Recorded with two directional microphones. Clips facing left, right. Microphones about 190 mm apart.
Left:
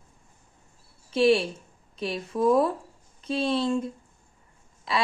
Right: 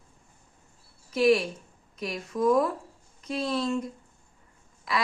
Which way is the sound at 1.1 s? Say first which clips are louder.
Left 1 dB; 30° left (ahead or behind).